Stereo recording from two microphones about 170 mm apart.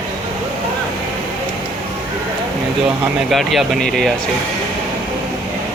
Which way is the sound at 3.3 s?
Centre (ahead or behind).